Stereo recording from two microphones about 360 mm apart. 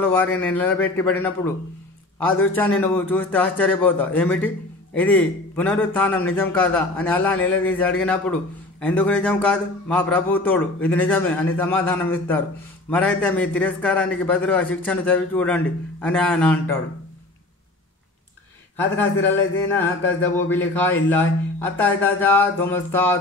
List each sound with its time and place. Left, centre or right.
0.0 s a man's voice: centre
20.2 s a man's voice: centre